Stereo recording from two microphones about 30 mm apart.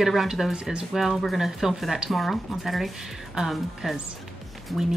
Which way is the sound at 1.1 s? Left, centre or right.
Centre.